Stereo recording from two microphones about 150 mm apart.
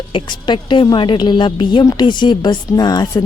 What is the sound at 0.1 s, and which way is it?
A woman's voice, 35° left (ahead or behind).